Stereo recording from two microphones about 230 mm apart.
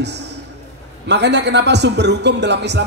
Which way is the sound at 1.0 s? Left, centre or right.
Right.